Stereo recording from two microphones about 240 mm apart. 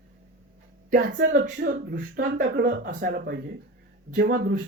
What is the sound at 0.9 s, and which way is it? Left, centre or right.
Speech, right.